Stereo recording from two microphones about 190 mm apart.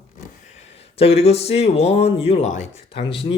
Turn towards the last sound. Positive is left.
turn(degrees=25)  # may be behind; listen again after turning